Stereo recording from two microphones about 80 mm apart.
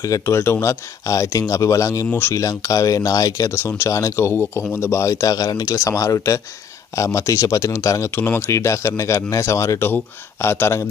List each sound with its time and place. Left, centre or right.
0.0 s speech: left
2.0 s speech: left
2.3 s speech: left
3.5 s speech: left
8.1 s speech: left
8.5 s speech: left